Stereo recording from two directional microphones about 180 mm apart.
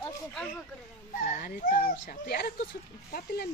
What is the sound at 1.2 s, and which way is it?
Speech, 45° left (ahead or behind).